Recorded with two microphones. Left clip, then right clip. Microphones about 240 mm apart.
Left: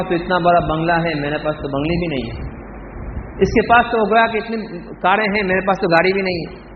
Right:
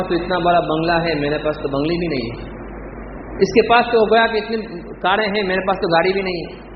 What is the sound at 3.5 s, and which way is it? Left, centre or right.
A woman's voice, left.